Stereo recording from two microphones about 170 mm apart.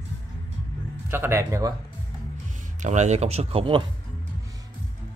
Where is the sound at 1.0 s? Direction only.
15° right (ahead or behind).